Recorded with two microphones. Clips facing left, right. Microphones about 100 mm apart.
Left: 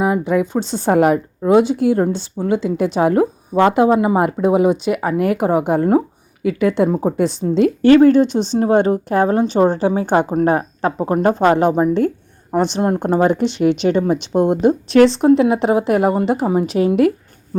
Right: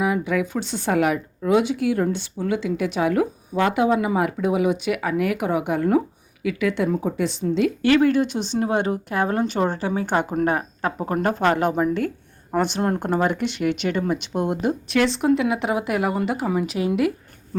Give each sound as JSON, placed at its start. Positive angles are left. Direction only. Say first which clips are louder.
{"t": 0.0, "sound": "speech", "louder": "left 5 dB", "side_deg": 30}